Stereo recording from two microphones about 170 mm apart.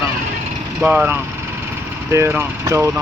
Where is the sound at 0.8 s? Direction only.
10° right (ahead or behind).